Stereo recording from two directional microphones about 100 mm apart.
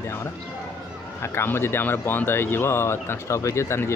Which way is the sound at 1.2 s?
25° left (ahead or behind).